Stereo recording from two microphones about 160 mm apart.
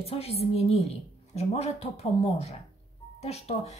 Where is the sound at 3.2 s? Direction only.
40° left (ahead or behind).